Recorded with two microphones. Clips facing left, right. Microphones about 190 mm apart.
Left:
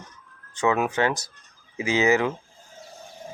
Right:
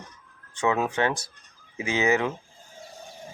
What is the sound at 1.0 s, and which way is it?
Speech, 25° right (ahead or behind).